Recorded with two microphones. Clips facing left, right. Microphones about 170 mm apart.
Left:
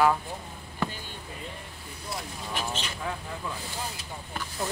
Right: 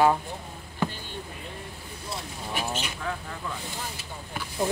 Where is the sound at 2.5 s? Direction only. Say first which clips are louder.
Right 2 dB; 10° right (ahead or behind).